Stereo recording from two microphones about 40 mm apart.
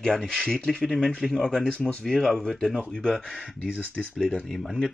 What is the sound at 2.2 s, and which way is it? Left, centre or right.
Speech, centre.